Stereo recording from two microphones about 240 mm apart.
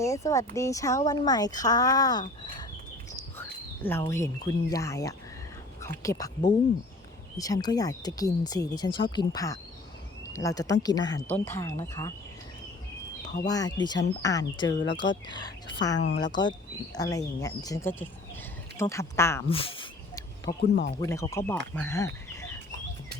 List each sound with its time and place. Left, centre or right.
0.0 s speech: centre
4.0 s speech: centre
13.5 s speech: centre
19.5 s a sound: left
20.6 s speech: left
21.0 s speech: centre
21.8 s fowl: centre